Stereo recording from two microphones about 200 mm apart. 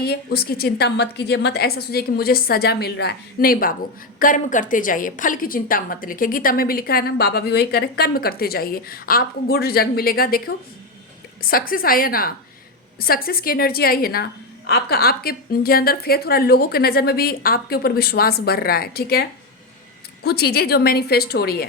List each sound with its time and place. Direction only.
0.0 s a woman's voice: 50° left (ahead or behind)
20.2 s a woman's voice: 50° left (ahead or behind)